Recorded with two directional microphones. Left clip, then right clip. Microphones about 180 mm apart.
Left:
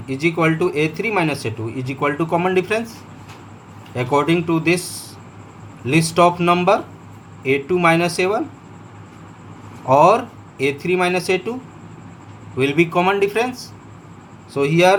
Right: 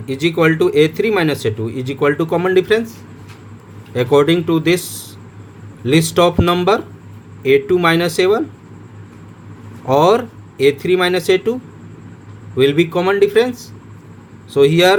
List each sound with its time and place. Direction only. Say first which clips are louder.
0.2 s speech: right 4 dB; 50° right (ahead or behind)
3.9 s speech: right 5 dB; 50° right (ahead or behind)
5.8 s speech: right 2 dB; 50° right (ahead or behind)
9.9 s speech: even; 50° right (ahead or behind)
12.5 s speech: right 3 dB; 45° right (ahead or behind)